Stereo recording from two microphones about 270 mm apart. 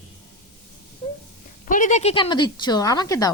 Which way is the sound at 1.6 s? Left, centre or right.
Left.